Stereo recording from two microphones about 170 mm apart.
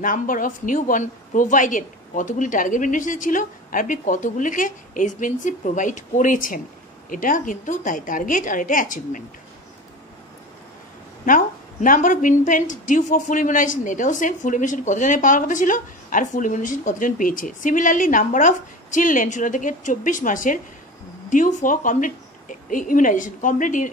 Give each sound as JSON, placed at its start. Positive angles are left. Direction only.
{"t": 0.0, "sound": "a woman's voice", "side_deg": 50}
{"t": 11.2, "sound": "a woman's voice", "side_deg": 50}